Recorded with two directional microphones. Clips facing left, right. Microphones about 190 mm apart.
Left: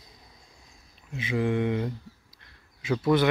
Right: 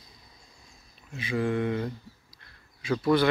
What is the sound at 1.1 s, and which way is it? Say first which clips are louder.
Speech: left 1 dB; 20° left (ahead or behind).